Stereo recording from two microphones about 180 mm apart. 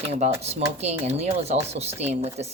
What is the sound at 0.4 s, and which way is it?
Speech, 35° right (ahead or behind).